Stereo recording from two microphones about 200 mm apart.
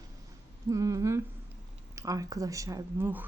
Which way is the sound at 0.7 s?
15° right (ahead or behind).